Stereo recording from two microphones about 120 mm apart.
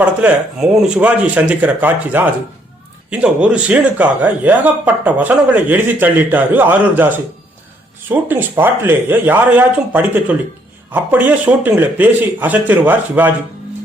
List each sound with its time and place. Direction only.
0.0 s a man's voice: 10° right (ahead or behind)